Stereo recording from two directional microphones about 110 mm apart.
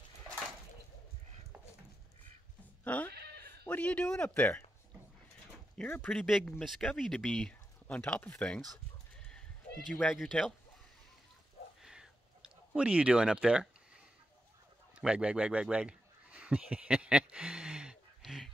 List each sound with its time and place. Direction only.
2.8 s bleat: 15° left (ahead or behind)
3.6 s speech: 10° left (ahead or behind)
5.8 s speech: 15° left (ahead or behind)
9.9 s speech: centre (ahead or behind)
11.8 s a sound: 5° right (ahead or behind)
15.0 s a sound: 10° right (ahead or behind)